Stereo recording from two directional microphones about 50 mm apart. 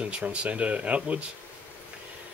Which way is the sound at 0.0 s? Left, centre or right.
Right.